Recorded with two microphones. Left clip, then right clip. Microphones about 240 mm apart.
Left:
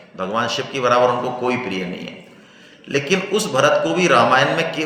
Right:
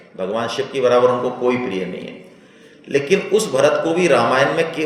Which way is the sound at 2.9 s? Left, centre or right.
Left.